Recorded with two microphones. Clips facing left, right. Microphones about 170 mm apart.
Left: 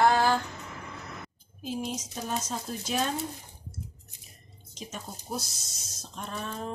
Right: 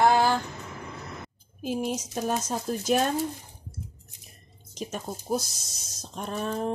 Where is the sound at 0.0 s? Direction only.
15° right (ahead or behind).